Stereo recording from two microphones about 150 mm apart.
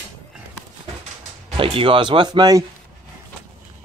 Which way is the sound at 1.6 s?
35° right (ahead or behind).